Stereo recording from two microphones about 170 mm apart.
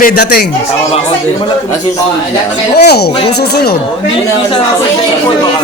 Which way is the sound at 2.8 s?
75° left (ahead or behind).